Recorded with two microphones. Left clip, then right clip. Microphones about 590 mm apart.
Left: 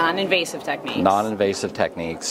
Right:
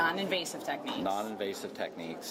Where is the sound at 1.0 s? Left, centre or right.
Left.